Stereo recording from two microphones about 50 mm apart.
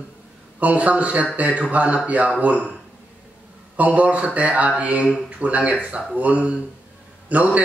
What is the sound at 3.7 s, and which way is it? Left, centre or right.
A man's voice, right.